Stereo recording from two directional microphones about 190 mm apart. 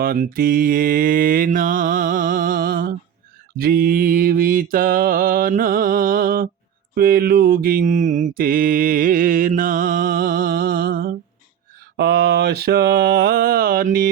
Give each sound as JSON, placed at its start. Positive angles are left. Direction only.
{"t": 0.0, "sound": "mantra", "side_deg": -50}